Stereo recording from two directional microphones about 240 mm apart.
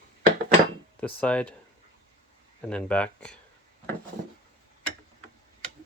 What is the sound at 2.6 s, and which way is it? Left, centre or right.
Speech, centre.